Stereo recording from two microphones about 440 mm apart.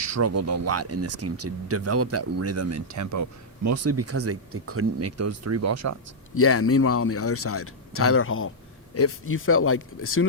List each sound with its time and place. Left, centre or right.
0.0 s speech: right
6.3 s speech: left